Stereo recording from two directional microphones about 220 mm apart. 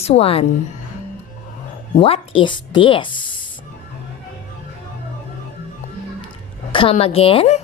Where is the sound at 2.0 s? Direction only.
25° left (ahead or behind).